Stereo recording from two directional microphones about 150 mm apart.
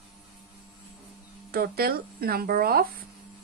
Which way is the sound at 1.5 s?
90° right.